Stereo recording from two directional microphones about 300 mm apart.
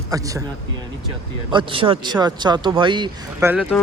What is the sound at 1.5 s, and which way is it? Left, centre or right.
Speech, centre.